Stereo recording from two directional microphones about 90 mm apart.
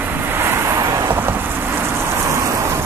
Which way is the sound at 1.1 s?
25° right (ahead or behind).